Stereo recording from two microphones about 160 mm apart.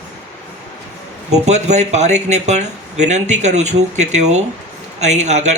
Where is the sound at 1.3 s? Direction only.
45° right (ahead or behind).